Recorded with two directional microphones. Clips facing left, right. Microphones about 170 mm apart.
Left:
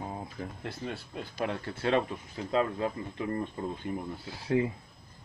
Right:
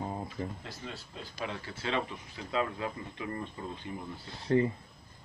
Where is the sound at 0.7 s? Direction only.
60° left (ahead or behind).